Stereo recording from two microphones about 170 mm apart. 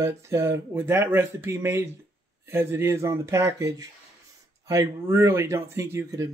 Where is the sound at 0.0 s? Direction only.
15° right (ahead or behind).